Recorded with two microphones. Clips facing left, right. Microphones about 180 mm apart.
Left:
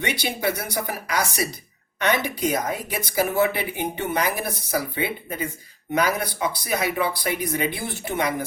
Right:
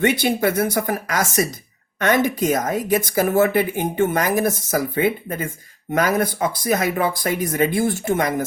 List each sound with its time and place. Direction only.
0.0 s a woman's voice: 50° right (ahead or behind)